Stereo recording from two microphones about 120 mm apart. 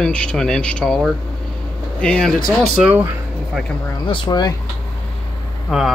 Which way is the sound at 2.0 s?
5° left (ahead or behind).